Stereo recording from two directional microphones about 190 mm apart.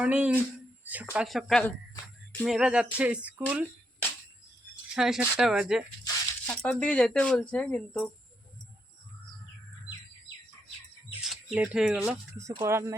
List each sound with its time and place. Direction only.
0.0 s speech: 10° right (ahead or behind)
4.9 s speech: 5° right (ahead or behind)
11.1 s speech: 5° right (ahead or behind)